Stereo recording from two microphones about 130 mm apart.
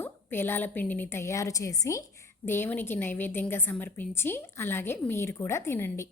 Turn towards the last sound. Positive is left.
turn(degrees=20)  # may be behind; listen again after turning